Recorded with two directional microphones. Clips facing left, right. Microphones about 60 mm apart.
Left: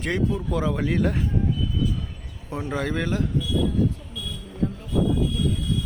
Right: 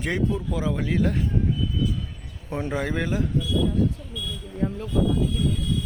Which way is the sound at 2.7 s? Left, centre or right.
Centre.